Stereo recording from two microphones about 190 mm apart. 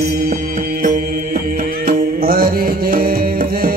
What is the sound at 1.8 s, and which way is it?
Music, 50° right (ahead or behind).